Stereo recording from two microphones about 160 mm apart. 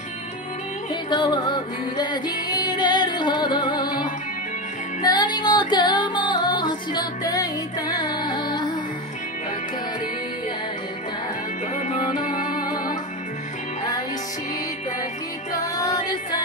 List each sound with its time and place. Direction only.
1.1 s music: 30° left (ahead or behind)
11.9 s music: 55° left (ahead or behind)
15.5 s music: 20° left (ahead or behind)